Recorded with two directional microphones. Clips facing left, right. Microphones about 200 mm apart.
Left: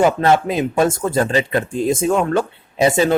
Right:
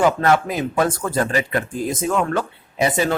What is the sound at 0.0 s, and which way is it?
Speech, 25° left (ahead or behind).